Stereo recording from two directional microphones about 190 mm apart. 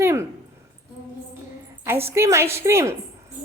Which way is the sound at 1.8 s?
15° right (ahead or behind).